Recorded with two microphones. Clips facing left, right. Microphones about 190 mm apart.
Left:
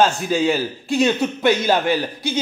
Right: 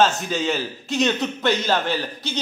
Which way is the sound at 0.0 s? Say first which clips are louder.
Left 3 dB; 10° left (ahead or behind).